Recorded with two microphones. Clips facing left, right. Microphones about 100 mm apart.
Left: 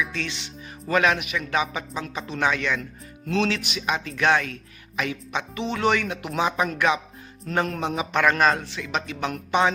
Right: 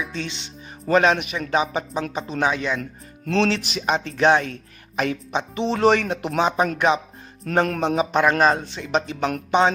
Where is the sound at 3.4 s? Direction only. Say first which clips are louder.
Right 3 dB; 35° right (ahead or behind).